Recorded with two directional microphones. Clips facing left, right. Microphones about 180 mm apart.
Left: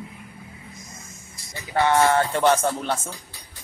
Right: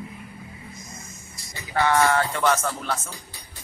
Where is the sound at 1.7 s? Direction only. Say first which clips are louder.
Left 2 dB; 20° left (ahead or behind).